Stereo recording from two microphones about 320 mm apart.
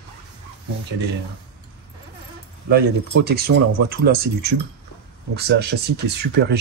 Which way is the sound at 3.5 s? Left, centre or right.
Right.